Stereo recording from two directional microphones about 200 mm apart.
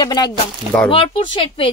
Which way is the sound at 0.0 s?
20° left (ahead or behind).